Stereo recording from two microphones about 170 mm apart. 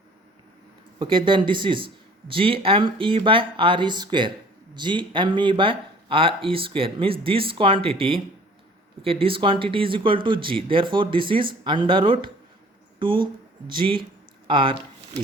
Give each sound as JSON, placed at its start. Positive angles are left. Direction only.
{"t": 0.9, "sound": "speech", "side_deg": -30}